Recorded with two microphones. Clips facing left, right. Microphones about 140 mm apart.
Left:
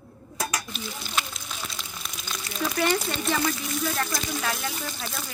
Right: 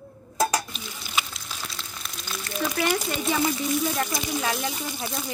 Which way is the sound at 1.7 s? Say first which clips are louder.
Even; 5° left (ahead or behind).